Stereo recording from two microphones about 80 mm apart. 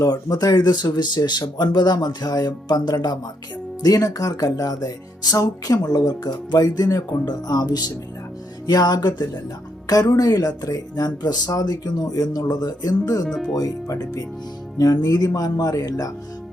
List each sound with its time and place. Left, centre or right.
0.0 s speech: left
3.8 s speech: left
13.2 s speech: centre
13.5 s speech: left